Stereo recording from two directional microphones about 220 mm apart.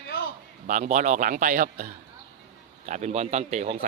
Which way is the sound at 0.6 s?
35° right (ahead or behind).